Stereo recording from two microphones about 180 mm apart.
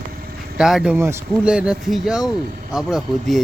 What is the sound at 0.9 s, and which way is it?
Speech, 15° right (ahead or behind).